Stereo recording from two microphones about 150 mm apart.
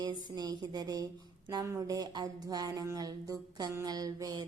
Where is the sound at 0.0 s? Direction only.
30° right (ahead or behind).